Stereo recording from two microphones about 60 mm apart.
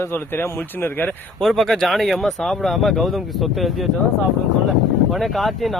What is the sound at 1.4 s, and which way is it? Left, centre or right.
Speech, centre.